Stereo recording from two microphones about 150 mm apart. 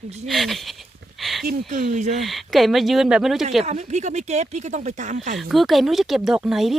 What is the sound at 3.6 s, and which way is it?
Speech, 50° right (ahead or behind).